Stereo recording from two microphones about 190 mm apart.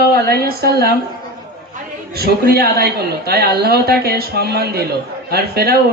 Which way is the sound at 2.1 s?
55° right (ahead or behind).